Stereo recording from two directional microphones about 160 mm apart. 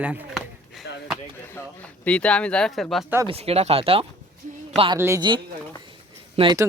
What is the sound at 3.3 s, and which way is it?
Speech, 40° right (ahead or behind).